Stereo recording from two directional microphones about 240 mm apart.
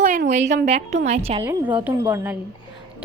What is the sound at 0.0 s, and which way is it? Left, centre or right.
A woman's voice, right.